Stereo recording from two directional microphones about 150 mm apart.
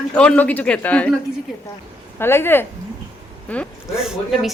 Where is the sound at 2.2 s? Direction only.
15° left (ahead or behind).